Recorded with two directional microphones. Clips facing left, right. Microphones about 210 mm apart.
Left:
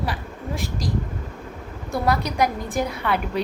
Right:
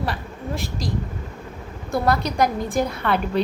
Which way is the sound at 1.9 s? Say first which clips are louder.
Right 2 dB; 15° left (ahead or behind).